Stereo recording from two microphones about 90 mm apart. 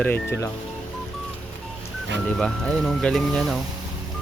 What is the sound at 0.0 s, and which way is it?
Speech, 25° left (ahead or behind).